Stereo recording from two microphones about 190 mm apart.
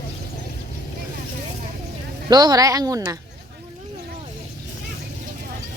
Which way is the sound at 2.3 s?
20° right (ahead or behind).